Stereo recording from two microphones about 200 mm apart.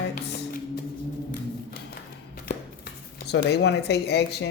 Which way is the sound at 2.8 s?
55° left (ahead or behind).